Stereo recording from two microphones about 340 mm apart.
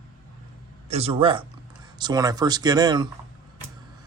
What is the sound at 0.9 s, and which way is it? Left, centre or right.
Speech, centre.